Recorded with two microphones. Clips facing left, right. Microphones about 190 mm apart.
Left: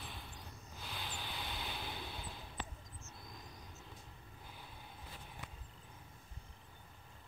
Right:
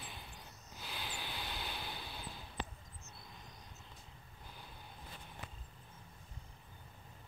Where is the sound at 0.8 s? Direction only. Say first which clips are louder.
Right 1 dB; centre (ahead or behind).